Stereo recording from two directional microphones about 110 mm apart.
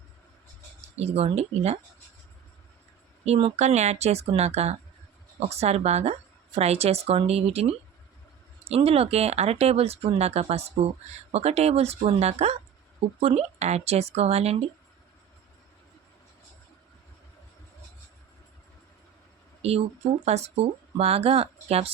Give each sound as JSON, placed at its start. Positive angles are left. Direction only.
{"t": 0.9, "sound": "a woman's voice", "side_deg": -70}
{"t": 3.2, "sound": "a woman's voice", "side_deg": -70}
{"t": 13.1, "sound": "a woman's voice", "side_deg": -70}
{"t": 19.6, "sound": "speech", "side_deg": -65}
{"t": 20.2, "sound": "a woman's voice", "side_deg": -75}